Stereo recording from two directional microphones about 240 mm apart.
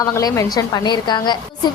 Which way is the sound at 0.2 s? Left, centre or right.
Centre.